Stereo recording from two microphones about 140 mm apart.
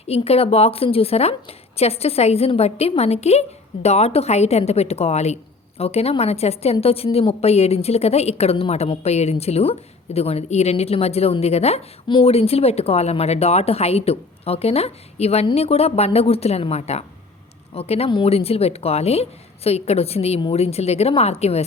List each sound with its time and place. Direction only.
0.1 s speech: 45° left (ahead or behind)